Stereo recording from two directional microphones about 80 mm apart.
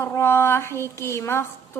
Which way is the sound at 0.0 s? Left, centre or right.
Left.